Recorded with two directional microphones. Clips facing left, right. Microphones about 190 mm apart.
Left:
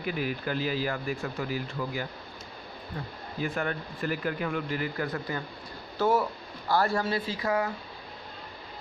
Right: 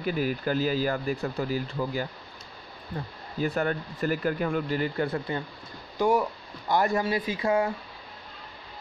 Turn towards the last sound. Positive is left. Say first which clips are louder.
# right 3 dB
turn(degrees=-25)  # may be behind; listen again after turning